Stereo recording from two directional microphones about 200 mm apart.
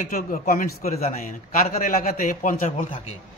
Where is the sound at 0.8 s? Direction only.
30° left (ahead or behind).